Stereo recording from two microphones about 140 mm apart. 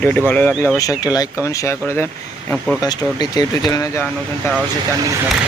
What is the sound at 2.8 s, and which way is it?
Speech, 30° left (ahead or behind).